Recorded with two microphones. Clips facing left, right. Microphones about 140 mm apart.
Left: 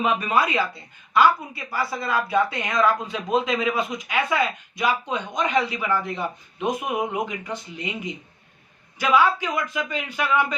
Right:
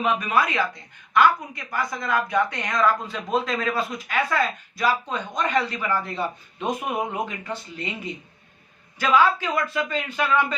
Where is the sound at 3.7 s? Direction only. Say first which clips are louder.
Left 1 dB; 20° left (ahead or behind).